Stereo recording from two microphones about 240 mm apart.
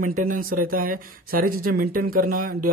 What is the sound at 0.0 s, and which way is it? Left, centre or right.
Speech, right.